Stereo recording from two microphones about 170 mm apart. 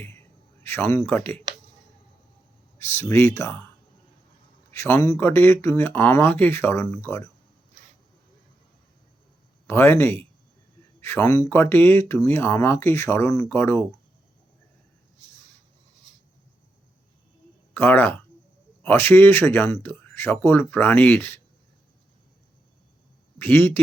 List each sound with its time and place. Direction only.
0.6 s speech: 15° left (ahead or behind)
2.7 s speech: 15° left (ahead or behind)
4.7 s a man's voice: 15° left (ahead or behind)
9.6 s speech: 15° left (ahead or behind)
17.7 s speech: 10° left (ahead or behind)
23.4 s speech: 10° left (ahead or behind)